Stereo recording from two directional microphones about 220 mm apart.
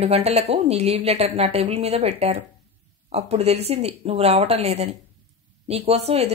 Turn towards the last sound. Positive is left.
turn(degrees=-30)  # may be behind; listen again after turning